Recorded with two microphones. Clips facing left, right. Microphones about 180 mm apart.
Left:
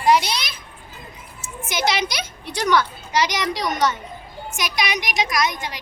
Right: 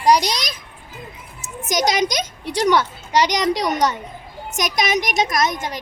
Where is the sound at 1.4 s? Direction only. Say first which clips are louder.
Right 4 dB; 40° right (ahead or behind).